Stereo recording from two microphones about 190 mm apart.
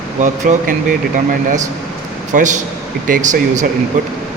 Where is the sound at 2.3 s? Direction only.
40° right (ahead or behind).